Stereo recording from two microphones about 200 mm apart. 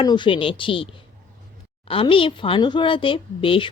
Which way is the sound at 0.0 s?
25° left (ahead or behind).